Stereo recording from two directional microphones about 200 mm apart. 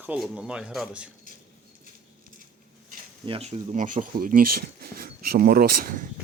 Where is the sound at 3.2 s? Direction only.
30° right (ahead or behind); by 6.0 s 45° right (ahead or behind).